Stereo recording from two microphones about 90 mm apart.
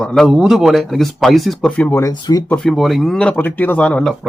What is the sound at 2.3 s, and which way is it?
Speech, 45° left (ahead or behind).